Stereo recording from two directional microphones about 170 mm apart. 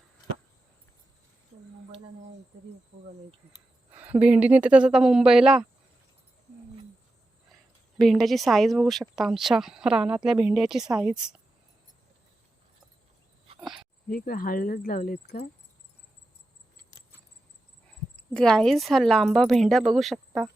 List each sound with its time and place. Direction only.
3.9 s speech: 10° right (ahead or behind)
7.9 s speech: centre (ahead or behind)
14.1 s speech: 60° left (ahead or behind)
18.2 s speech: 5° left (ahead or behind)